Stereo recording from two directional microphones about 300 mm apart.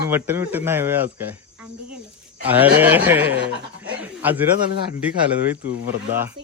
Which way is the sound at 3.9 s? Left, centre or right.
Centre.